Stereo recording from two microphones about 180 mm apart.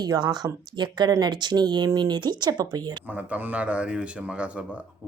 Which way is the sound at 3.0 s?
10° right (ahead or behind).